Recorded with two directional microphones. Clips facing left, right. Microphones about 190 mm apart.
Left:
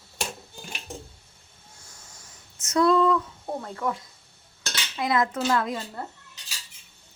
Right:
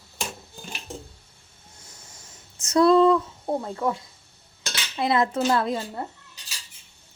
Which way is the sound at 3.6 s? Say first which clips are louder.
Right 3 dB; 25° right (ahead or behind).